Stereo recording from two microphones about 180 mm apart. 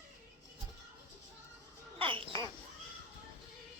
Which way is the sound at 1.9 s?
30° right (ahead or behind).